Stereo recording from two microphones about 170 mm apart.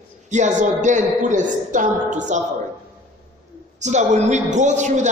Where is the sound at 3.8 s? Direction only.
45° right (ahead or behind).